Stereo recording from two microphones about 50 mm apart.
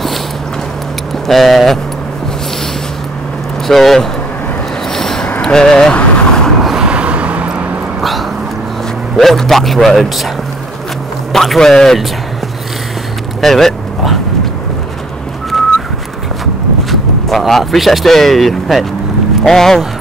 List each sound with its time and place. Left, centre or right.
1.2 s speech: centre
3.6 s speech: centre
4.9 s vehicle: centre
5.4 s speech: centre
5.9 s vehicle: centre
6.8 s vehicle: right
8.0 s dog: centre
9.1 s speech: centre
11.3 s a man's voice: centre
13.4 s vehicle: centre
16.9 s a man's voice: centre